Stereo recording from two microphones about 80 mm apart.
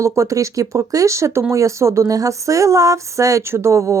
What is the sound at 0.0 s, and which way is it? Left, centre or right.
Speech, right.